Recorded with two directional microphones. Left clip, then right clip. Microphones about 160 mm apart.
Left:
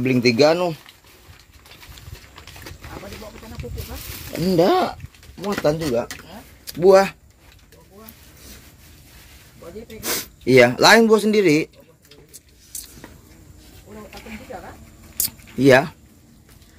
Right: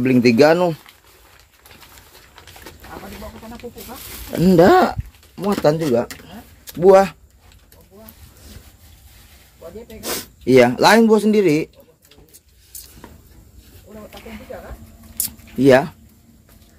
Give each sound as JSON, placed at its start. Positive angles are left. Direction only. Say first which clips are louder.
{"t": 0.0, "sound": "speech", "louder": "right 3 dB", "side_deg": -30}
{"t": 4.3, "sound": "speech", "louder": "right 5 dB", "side_deg": -50}
{"t": 6.6, "sound": "a sound", "louder": "right 1 dB", "side_deg": -25}
{"t": 6.9, "sound": "speech", "louder": "right 2 dB", "side_deg": -10}
{"t": 10.0, "sound": "a man's voice", "louder": "right 1 dB", "side_deg": -5}
{"t": 15.1, "sound": "keys jangling", "louder": "right 1 dB", "side_deg": 0}